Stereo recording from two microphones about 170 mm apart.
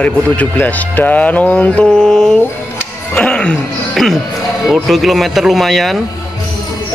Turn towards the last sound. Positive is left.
turn(degrees=0)  # may be behind; listen again after turning